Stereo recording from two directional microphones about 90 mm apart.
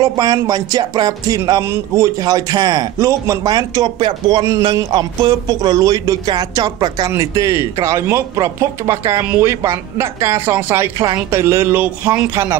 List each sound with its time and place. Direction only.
0.0 s music: 45° right (ahead or behind)
4.0 s speech: 55° right (ahead or behind)
4.5 s music: 40° right (ahead or behind)
7.1 s speech: 40° right (ahead or behind)